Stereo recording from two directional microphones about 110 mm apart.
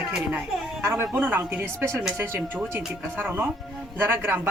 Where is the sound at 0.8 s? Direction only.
25° right (ahead or behind).